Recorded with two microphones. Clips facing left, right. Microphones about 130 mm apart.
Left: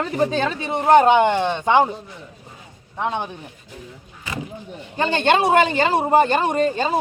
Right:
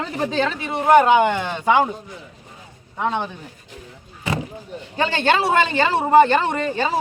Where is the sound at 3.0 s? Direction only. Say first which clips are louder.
Right 1 dB; 15° left (ahead or behind).